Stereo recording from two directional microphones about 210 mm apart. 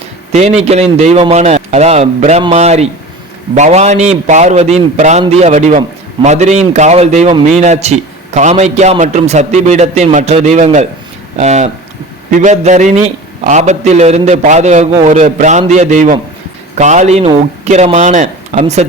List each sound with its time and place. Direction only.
0.3 s a man's voice: 30° right (ahead or behind)